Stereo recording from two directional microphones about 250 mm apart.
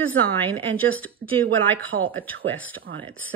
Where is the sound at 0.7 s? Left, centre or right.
Centre.